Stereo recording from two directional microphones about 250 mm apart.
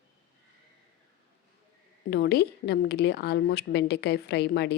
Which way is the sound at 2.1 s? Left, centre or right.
Left.